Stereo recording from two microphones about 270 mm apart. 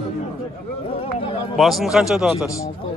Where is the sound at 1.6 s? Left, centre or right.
Centre.